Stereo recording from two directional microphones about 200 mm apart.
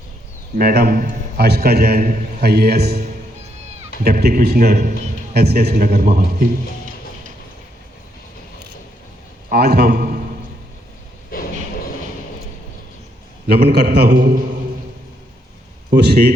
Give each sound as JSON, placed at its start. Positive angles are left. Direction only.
{"t": 0.6, "sound": "a man's voice", "side_deg": -50}
{"t": 4.0, "sound": "a man's voice", "side_deg": -50}
{"t": 9.5, "sound": "a man's voice", "side_deg": -55}
{"t": 11.3, "sound": "vehicle", "side_deg": 45}
{"t": 13.5, "sound": "a man's voice", "side_deg": -55}
{"t": 14.1, "sound": "a man's voice", "side_deg": -40}